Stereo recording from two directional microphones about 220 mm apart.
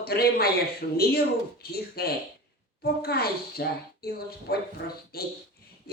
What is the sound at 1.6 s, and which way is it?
Speech, 45° left (ahead or behind).